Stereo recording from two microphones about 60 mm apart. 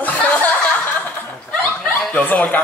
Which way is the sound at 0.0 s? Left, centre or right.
Left.